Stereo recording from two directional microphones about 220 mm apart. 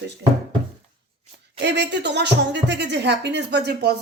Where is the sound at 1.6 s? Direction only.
50° right (ahead or behind).